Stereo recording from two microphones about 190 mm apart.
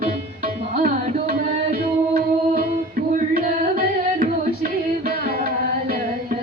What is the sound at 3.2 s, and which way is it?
Music, 45° right (ahead or behind).